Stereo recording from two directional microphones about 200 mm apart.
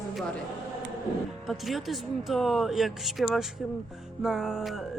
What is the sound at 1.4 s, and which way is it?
Speech, centre (ahead or behind).